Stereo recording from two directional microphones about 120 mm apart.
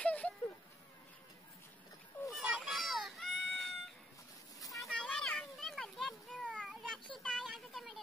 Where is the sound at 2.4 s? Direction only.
Centre (ahead or behind).